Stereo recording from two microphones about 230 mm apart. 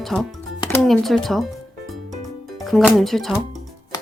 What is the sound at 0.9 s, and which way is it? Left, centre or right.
Speech, centre.